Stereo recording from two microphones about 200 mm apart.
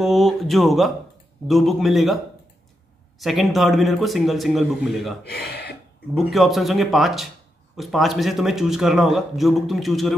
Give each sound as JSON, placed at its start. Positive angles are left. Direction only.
{"t": 0.0, "sound": "a man's voice", "side_deg": 0}
{"t": 3.2, "sound": "a man's voice", "side_deg": 0}
{"t": 5.3, "sound": "speech", "side_deg": 55}
{"t": 6.3, "sound": "a man's voice", "side_deg": 0}